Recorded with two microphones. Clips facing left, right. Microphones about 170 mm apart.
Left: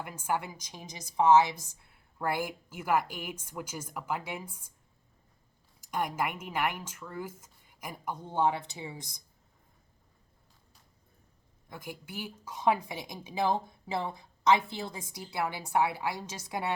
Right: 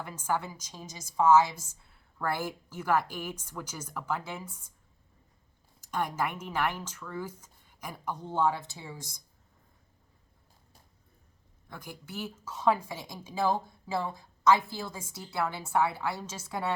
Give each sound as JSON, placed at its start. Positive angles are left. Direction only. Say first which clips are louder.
{"t": 0.0, "sound": "a woman's voice", "louder": "right 1 dB", "side_deg": 15}
{"t": 5.9, "sound": "a woman's voice", "louder": "even", "side_deg": 15}
{"t": 11.7, "sound": "a woman's voice", "louder": "even", "side_deg": 10}